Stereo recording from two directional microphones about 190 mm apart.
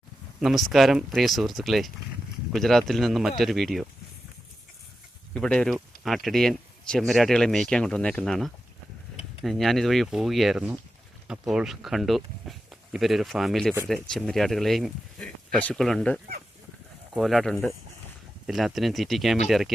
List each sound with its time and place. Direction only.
0.4 s speech: centre (ahead or behind)
5.3 s speech: 5° left (ahead or behind)